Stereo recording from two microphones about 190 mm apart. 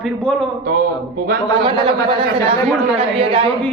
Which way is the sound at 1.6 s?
25° right (ahead or behind).